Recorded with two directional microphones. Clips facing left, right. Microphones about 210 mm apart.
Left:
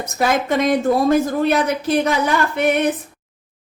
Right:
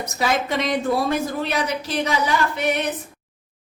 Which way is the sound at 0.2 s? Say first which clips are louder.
Left 5 dB; 50° left (ahead or behind).